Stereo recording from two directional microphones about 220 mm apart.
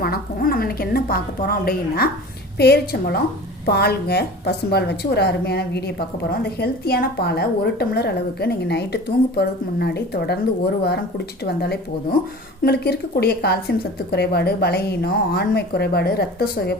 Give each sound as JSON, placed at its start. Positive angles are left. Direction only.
{"t": 0.0, "sound": "a woman's voice", "side_deg": 40}
{"t": 11.4, "sound": "a woman's voice", "side_deg": 45}